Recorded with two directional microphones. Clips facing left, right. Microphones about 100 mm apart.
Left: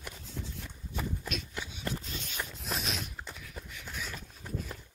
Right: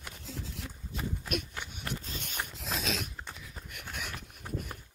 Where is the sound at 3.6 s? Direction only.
60° right (ahead or behind).